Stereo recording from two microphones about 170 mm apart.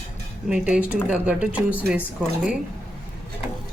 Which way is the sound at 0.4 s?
5° right (ahead or behind).